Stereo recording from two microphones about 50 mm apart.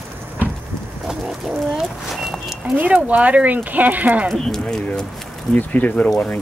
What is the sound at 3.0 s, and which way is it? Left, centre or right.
Speech, right.